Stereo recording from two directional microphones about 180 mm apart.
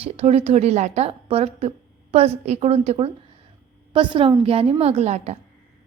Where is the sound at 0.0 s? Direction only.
35° right (ahead or behind).